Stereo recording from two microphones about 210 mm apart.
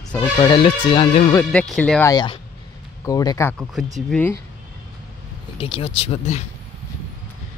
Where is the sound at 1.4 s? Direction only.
5° left (ahead or behind).